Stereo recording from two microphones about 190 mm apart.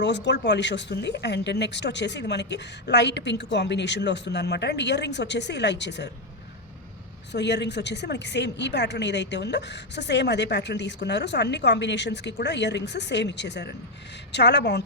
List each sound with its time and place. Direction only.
0.0 s a woman's voice: 65° left (ahead or behind)
7.3 s a woman's voice: 65° left (ahead or behind)